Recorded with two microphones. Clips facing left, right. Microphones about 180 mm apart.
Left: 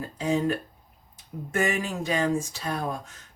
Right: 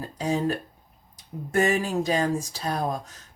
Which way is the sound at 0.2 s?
35° right (ahead or behind).